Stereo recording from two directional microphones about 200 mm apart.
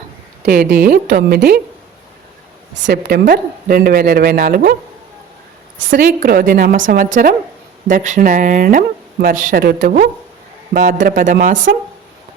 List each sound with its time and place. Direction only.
0.4 s speech: 45° right (ahead or behind)
2.7 s speech: 60° right (ahead or behind)
5.9 s speech: 45° right (ahead or behind)